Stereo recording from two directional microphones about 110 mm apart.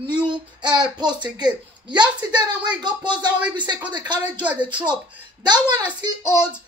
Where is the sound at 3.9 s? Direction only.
40° right (ahead or behind).